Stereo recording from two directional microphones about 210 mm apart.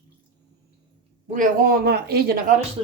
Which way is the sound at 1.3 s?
40° right (ahead or behind).